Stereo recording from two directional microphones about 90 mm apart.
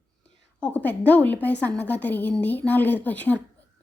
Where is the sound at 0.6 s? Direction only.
20° left (ahead or behind).